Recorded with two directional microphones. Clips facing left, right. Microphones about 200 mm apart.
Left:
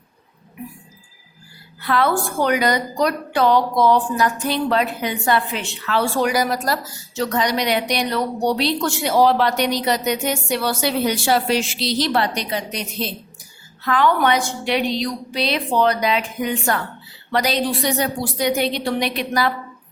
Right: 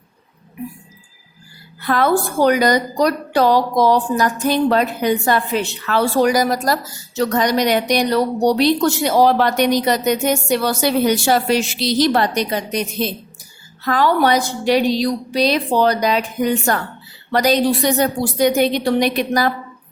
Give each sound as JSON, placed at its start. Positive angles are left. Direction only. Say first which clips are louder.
{"t": 1.9, "sound": "a woman's voice", "louder": "right 3 dB", "side_deg": -40}